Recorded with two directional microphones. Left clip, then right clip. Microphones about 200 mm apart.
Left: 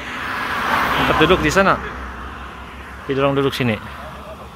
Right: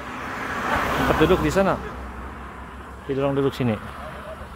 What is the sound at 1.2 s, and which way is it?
Speech, 10° right (ahead or behind).